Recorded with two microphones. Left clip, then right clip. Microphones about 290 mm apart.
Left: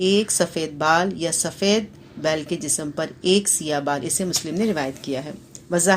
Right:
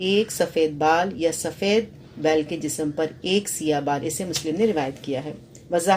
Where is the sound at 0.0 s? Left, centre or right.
Left.